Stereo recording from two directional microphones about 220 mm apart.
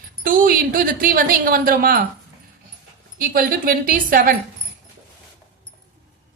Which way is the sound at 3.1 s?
40° right (ahead or behind).